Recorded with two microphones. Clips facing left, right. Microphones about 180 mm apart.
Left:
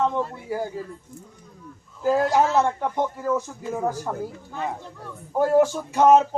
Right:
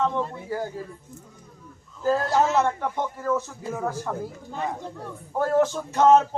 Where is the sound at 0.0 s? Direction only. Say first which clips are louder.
Left 1 dB; 10° left (ahead or behind).